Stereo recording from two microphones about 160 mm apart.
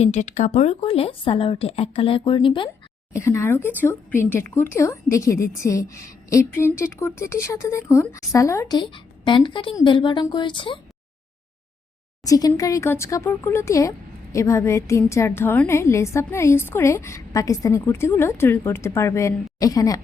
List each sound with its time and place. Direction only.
0.0 s speech: 45° left (ahead or behind); by 2.6 s 30° left (ahead or behind)
3.1 s a woman's voice: 15° left (ahead or behind)
12.2 s a woman's voice: 20° left (ahead or behind)